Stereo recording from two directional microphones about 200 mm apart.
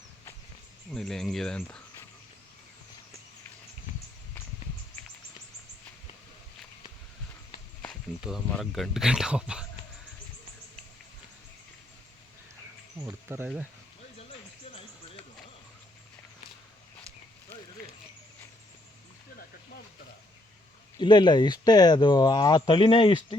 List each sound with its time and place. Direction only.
0.9 s speech: centre (ahead or behind)
7.8 s speech: centre (ahead or behind)
13.2 s speech: 10° right (ahead or behind)
21.0 s speech: 20° left (ahead or behind)